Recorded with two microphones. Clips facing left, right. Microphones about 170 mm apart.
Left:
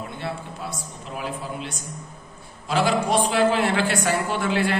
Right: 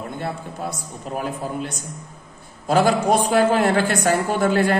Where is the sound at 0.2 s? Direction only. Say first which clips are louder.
Right 3 dB; 45° right (ahead or behind).